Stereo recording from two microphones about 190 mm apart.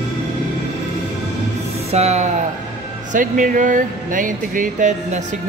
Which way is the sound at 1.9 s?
35° right (ahead or behind).